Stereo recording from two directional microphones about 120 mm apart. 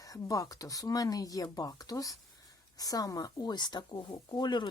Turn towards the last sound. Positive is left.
turn(degrees=40)  # may be behind; listen again after turning